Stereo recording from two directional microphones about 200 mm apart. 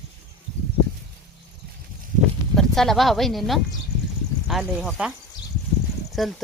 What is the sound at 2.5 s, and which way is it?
Speech, centre (ahead or behind).